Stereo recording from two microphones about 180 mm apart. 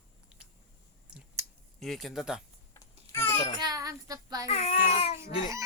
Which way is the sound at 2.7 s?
15° left (ahead or behind).